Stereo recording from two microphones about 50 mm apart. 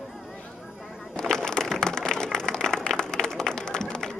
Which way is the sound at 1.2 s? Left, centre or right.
Centre.